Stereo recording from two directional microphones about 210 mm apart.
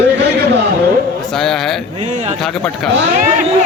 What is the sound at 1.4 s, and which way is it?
A man's voice, centre (ahead or behind).